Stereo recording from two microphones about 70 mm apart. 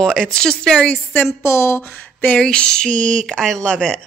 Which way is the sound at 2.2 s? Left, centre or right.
Centre.